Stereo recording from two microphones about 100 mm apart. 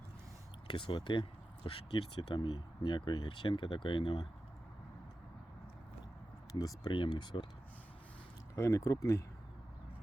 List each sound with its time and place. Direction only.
0.7 s speech: 55° left (ahead or behind)
6.5 s speech: 40° left (ahead or behind)
6.9 s speech: 50° left (ahead or behind)
8.5 s speech: 30° left (ahead or behind)